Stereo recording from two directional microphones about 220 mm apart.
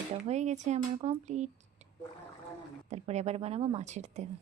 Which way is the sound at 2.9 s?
30° right (ahead or behind).